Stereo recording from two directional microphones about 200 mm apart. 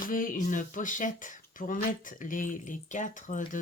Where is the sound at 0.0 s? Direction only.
40° left (ahead or behind).